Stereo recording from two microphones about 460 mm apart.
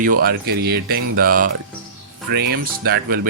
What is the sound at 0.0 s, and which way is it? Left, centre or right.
Speech, centre.